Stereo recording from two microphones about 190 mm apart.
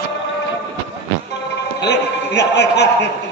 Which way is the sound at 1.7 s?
65° left (ahead or behind).